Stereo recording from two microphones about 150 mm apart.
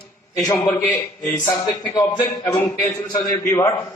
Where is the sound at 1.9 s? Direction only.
20° left (ahead or behind).